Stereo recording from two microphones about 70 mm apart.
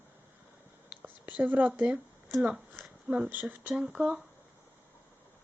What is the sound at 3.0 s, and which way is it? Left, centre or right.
Speech, centre.